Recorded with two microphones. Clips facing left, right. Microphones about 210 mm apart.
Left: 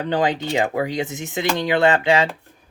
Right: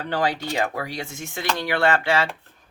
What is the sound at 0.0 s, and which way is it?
Speech, 20° left (ahead or behind).